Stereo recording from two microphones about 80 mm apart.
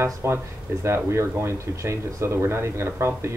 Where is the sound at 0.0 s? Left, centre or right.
Right.